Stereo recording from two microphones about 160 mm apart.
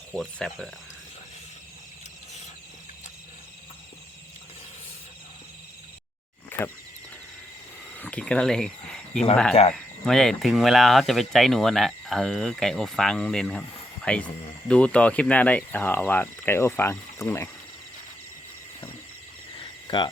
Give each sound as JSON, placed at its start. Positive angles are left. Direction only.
{"t": 0.1, "sound": "speech", "side_deg": 0}
{"t": 6.5, "sound": "a sound", "side_deg": 10}
{"t": 7.9, "sound": "speech", "side_deg": 10}
{"t": 19.5, "sound": "cricket", "side_deg": 30}